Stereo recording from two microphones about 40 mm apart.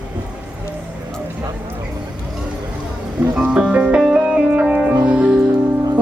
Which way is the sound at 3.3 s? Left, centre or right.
Right.